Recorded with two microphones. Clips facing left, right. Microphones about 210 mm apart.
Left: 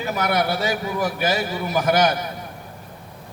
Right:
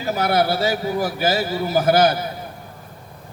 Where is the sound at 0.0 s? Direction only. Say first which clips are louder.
Right 3 dB; 35° right (ahead or behind).